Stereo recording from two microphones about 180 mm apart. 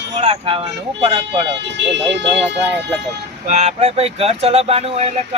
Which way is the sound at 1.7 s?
75° right (ahead or behind).